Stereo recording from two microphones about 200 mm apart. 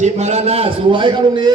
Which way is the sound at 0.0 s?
35° right (ahead or behind).